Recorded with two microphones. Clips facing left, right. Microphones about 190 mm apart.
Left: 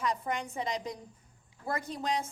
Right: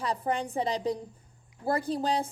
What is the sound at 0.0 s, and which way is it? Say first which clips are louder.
A woman's voice: right 3 dB; 35° right (ahead or behind).